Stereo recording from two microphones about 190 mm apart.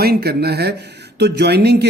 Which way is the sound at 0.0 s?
55° right (ahead or behind).